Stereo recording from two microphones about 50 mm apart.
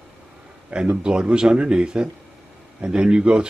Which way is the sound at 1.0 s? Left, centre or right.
Centre.